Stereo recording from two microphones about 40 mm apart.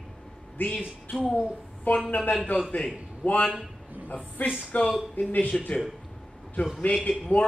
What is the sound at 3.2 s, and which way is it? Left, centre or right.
A woman's voice, left.